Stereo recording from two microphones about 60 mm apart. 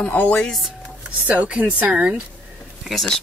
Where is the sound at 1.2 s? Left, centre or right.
Right.